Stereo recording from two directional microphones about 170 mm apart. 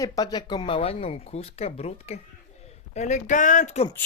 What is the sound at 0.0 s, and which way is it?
Speech, 25° left (ahead or behind).